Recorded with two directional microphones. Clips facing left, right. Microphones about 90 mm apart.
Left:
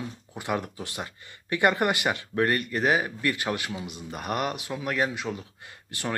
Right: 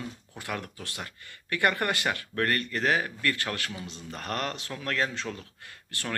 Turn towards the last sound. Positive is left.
turn(degrees=20)  # may be behind; listen again after turning